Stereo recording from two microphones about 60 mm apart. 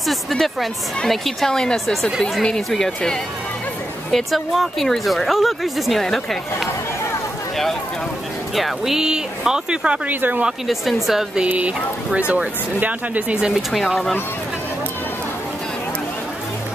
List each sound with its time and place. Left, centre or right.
0.0 s a woman's voice: centre
2.0 s a woman's voice: centre
4.1 s a woman's voice: centre
8.5 s speech: centre
10.0 s speech: right
11.1 s a woman's voice: centre
11.4 s speech: right
13.4 s a woman's voice: centre